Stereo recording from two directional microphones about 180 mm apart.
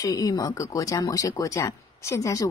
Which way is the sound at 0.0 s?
20° left (ahead or behind).